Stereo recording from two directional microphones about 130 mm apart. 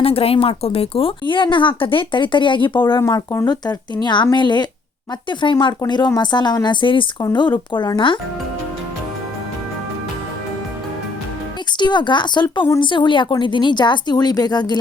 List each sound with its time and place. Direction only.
0.0 s speech: 50° left (ahead or behind)
11.8 s speech: 35° left (ahead or behind)